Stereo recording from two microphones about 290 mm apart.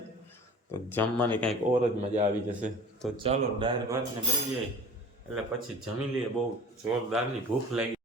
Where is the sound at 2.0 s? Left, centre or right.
Right.